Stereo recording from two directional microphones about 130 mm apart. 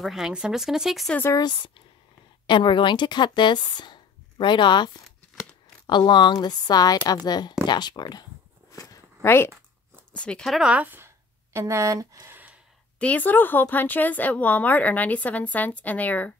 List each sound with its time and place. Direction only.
0.0 s speech: 5° right (ahead or behind)
1.3 s a woman's voice: 35° left (ahead or behind)
8.7 s a sound: 25° left (ahead or behind)
10.1 s speech: 10° left (ahead or behind); by 12.5 s 15° right (ahead or behind)
13.0 s speech: 10° left (ahead or behind)